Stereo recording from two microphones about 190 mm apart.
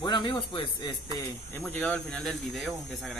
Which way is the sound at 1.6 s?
5° left (ahead or behind).